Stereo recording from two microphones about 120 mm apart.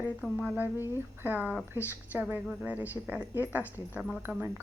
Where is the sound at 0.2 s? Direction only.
10° right (ahead or behind).